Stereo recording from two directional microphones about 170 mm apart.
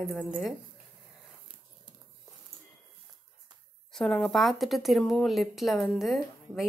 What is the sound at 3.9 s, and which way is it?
A woman's voice, centre (ahead or behind).